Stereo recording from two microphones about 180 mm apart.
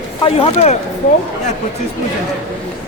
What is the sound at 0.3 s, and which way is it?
Speech, 35° left (ahead or behind).